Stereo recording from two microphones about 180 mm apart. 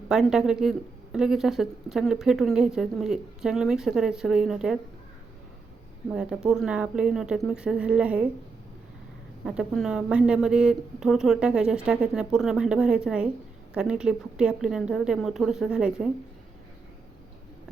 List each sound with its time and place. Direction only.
0.1 s speech: 5° right (ahead or behind)
6.1 s speech: 5° right (ahead or behind)
9.4 s speech: 5° right (ahead or behind)